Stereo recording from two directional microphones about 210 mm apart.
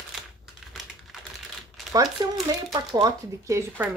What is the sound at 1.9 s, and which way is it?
Speech, 15° right (ahead or behind).